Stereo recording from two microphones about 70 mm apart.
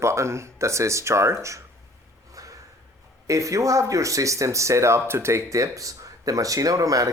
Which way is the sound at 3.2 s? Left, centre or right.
Right.